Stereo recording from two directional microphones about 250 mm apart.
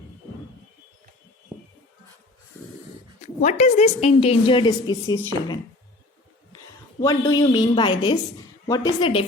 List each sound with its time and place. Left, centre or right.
3.4 s a woman's voice: left
7.0 s a woman's voice: centre